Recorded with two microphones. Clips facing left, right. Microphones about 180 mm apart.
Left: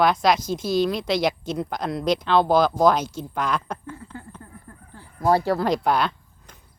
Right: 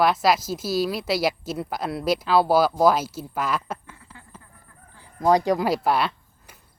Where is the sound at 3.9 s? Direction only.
40° left (ahead or behind).